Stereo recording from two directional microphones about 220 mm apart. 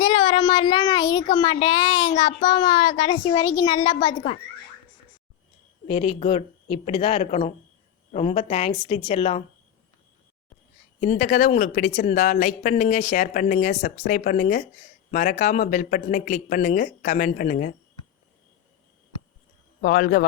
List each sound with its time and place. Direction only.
0.0 s a child's voice: 25° left (ahead or behind)
5.9 s a child's voice: 25° left (ahead or behind)
11.0 s speech: 35° left (ahead or behind)
19.8 s speech: 40° left (ahead or behind)